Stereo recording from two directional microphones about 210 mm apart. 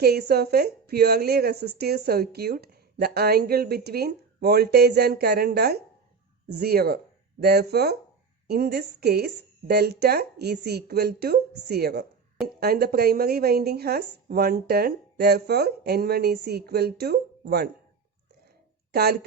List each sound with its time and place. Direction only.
0.0 s a woman's voice: 50° right (ahead or behind)
18.9 s speech: 50° right (ahead or behind)